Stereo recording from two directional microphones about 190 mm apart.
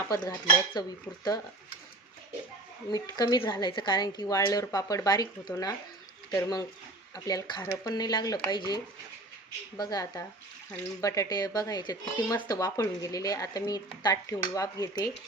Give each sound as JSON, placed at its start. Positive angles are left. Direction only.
{"t": 0.1, "sound": "speech", "side_deg": 20}
{"t": 2.9, "sound": "speech", "side_deg": 20}